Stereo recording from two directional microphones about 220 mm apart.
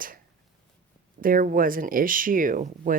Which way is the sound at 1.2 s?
40° right (ahead or behind).